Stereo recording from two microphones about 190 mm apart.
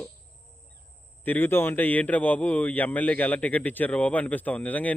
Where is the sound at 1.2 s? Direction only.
10° left (ahead or behind).